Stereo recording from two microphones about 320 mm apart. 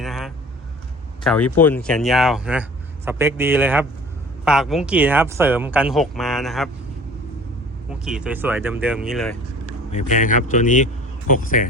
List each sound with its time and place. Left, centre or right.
0.0 s vehicle: centre
1.2 s speech: centre
7.9 s speech: centre
9.9 s speech: left